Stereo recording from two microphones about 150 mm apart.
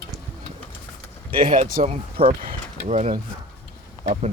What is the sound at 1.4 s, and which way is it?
Speech, 65° right (ahead or behind).